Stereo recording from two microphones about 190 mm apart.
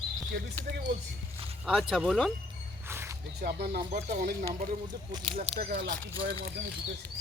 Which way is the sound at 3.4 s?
50° right (ahead or behind).